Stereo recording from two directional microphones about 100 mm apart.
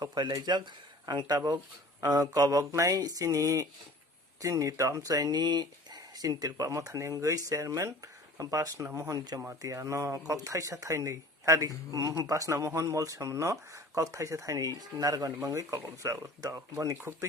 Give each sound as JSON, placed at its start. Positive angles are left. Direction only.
{"t": 0.0, "sound": "speech", "side_deg": -45}